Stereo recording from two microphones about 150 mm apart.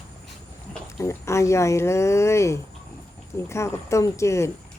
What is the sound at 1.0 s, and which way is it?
Speech, 20° left (ahead or behind).